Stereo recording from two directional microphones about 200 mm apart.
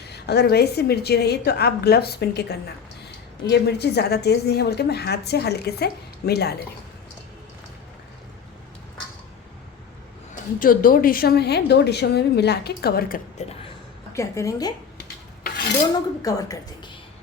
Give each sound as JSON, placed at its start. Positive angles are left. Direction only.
{"t": 0.0, "sound": "a woman's voice", "side_deg": 55}
{"t": 10.6, "sound": "a woman's voice", "side_deg": 45}
{"t": 14.1, "sound": "a woman's voice", "side_deg": 15}
{"t": 15.0, "sound": "filing", "side_deg": 45}
{"t": 15.9, "sound": "a woman's voice", "side_deg": 20}